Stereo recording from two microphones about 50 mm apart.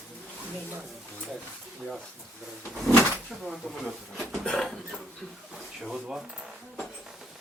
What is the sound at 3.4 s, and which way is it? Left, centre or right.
Speech, centre.